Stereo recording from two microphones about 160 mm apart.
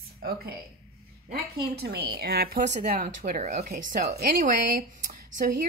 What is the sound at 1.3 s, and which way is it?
A woman's voice, 85° right.